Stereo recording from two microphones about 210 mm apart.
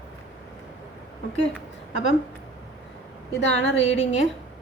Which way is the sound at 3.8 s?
30° left (ahead or behind).